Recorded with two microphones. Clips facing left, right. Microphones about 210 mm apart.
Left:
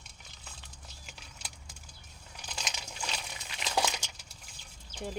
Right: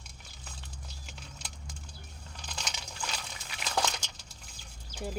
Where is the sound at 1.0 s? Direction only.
5° left (ahead or behind).